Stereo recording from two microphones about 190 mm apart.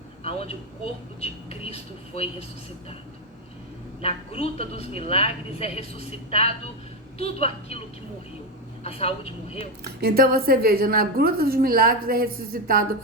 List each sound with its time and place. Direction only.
0.3 s a sound: 30° left (ahead or behind)
1.2 s a woman's voice: 35° left (ahead or behind)
4.0 s a woman's voice: 30° left (ahead or behind)
8.8 s a woman's voice: 30° left (ahead or behind)
9.8 s a woman's voice: 55° right (ahead or behind)